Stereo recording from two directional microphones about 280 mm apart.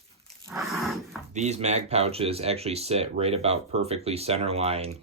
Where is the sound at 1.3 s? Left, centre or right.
Right.